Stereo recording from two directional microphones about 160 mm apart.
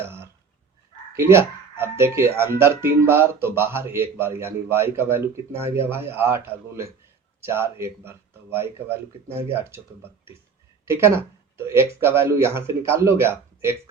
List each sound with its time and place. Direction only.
0.0 s dog: 15° right (ahead or behind)
1.1 s speech: 15° right (ahead or behind)